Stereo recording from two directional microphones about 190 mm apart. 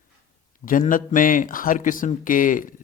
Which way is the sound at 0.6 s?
45° left (ahead or behind).